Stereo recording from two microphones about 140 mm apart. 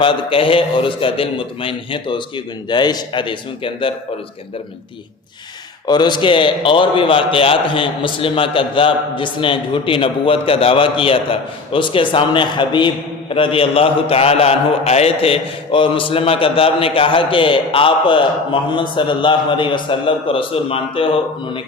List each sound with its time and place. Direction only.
0.0 s a man's voice: 40° left (ahead or behind)
5.9 s a man's voice: 30° left (ahead or behind)